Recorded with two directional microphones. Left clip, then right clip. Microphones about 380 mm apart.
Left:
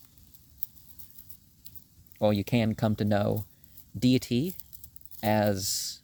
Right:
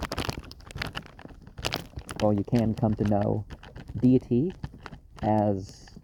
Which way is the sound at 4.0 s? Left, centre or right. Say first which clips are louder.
Right 3 dB; left.